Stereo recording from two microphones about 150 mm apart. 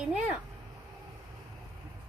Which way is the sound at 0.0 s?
5° right (ahead or behind).